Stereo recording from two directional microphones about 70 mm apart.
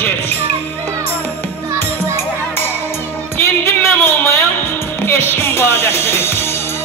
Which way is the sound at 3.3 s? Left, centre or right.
Left.